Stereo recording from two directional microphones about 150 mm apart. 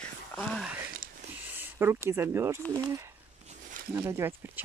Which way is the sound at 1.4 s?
15° right (ahead or behind).